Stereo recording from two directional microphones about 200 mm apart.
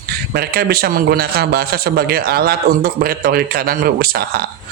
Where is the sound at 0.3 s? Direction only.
50° right (ahead or behind).